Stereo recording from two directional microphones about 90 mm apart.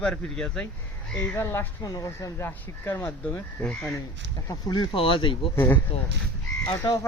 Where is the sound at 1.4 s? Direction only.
30° left (ahead or behind).